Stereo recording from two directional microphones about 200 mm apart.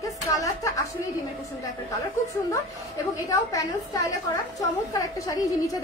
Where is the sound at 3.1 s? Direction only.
15° left (ahead or behind).